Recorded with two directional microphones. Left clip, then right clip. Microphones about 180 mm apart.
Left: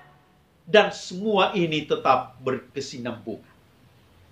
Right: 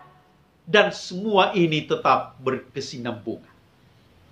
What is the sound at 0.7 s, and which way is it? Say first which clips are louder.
Speech: even; 20° right (ahead or behind).